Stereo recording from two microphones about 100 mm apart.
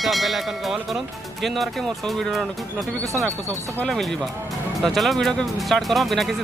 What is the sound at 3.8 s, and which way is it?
Speech, 5° left (ahead or behind).